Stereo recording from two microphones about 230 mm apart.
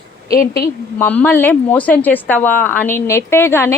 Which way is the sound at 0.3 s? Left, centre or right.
Left.